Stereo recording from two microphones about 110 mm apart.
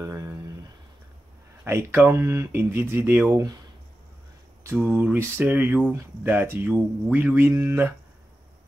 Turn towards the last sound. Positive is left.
turn(degrees=-25)  # may be behind; listen again after turning